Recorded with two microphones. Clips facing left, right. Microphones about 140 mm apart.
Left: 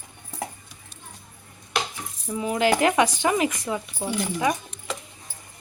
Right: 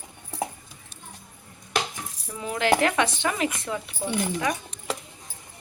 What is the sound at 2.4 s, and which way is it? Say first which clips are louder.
Speech: left 2 dB; 15° left (ahead or behind).